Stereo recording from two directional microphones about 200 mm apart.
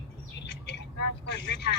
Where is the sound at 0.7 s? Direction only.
55° left (ahead or behind).